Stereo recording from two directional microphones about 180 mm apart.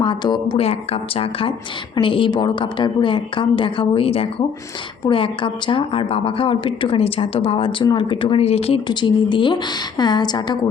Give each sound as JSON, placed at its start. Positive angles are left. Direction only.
{"t": 0.0, "sound": "a woman's voice", "side_deg": 25}